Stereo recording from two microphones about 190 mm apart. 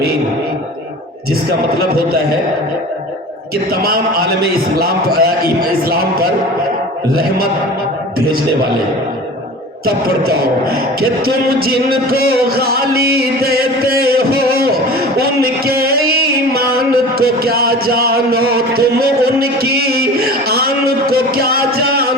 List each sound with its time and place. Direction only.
1.3 s a man's voice: 55° right (ahead or behind)
3.7 s a man's voice: 55° right (ahead or behind)
9.8 s speech: 55° right (ahead or behind)